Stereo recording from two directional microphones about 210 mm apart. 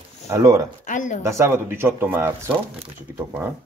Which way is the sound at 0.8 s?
40° left (ahead or behind).